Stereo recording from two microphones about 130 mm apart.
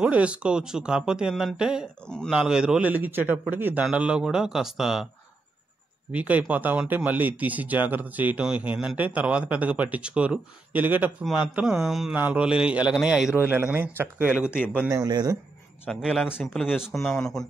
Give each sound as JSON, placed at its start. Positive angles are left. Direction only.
{"t": 0.0, "sound": "speech", "side_deg": -10}
{"t": 2.0, "sound": "speech", "side_deg": 5}
{"t": 2.3, "sound": "a man's voice", "side_deg": -5}
{"t": 6.1, "sound": "speech", "side_deg": -10}
{"t": 11.5, "sound": "a man's voice", "side_deg": -5}
{"t": 14.9, "sound": "speech", "side_deg": -30}
{"t": 15.9, "sound": "a man's voice", "side_deg": -5}